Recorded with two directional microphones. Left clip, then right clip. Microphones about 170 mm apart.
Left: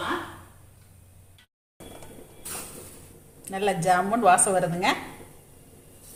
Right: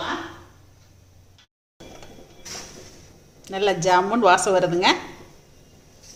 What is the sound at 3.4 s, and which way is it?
A woman's voice, 30° right (ahead or behind).